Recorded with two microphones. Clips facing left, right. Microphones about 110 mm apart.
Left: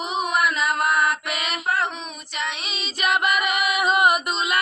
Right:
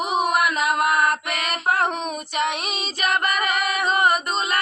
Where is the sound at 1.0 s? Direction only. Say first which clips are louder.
Right 1 dB; 50° right (ahead or behind).